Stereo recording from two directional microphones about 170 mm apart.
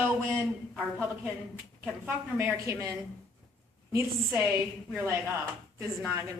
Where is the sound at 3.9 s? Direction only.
15° right (ahead or behind).